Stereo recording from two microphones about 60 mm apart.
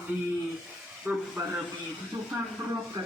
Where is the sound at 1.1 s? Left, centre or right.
Centre.